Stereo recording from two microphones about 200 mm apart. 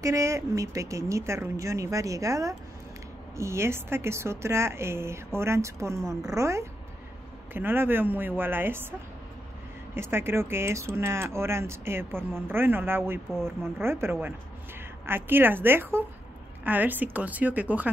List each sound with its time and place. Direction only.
0.0 s speech: 15° right (ahead or behind)
9.9 s speech: 10° right (ahead or behind)